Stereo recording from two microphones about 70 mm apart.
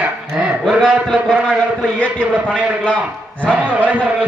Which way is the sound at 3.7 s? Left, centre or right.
Right.